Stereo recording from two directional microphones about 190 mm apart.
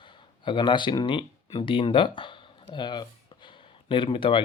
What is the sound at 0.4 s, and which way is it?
Speech, 25° left (ahead or behind).